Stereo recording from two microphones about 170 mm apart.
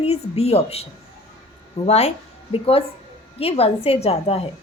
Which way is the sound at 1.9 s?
40° left (ahead or behind).